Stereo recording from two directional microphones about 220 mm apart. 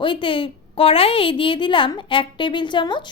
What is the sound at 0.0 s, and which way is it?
A woman's voice, 20° left (ahead or behind).